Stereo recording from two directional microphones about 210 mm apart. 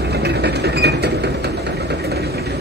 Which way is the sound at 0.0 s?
50° right (ahead or behind).